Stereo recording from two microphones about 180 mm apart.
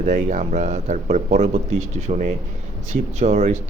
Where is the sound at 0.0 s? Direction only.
40° right (ahead or behind).